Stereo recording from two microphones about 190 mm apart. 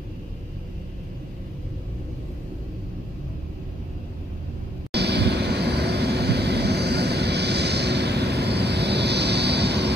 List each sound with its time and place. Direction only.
4.9 s vehicle: 60° right (ahead or behind)